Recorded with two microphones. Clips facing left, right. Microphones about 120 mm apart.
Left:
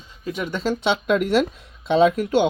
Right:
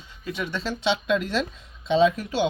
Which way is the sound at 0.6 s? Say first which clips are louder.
Left 4 dB; 55° left (ahead or behind).